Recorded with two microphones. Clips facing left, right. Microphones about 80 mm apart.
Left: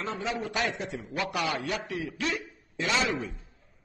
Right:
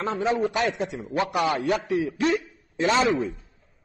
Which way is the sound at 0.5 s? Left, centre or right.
Right.